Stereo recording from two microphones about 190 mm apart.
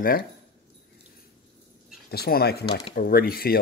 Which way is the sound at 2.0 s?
55° left (ahead or behind).